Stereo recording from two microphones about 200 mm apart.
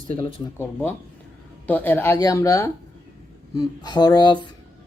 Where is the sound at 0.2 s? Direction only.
25° left (ahead or behind).